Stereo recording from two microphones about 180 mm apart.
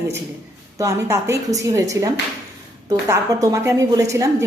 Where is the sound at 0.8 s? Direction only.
15° right (ahead or behind).